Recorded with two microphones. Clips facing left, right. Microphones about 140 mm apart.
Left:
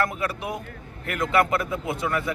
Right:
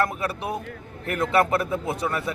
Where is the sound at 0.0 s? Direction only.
30° right (ahead or behind).